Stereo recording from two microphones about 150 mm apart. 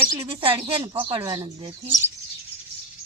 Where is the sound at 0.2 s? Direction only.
40° right (ahead or behind).